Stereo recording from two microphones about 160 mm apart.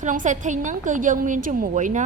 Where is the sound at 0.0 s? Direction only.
50° right (ahead or behind).